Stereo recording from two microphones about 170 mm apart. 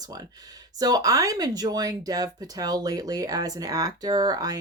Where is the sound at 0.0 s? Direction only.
20° right (ahead or behind).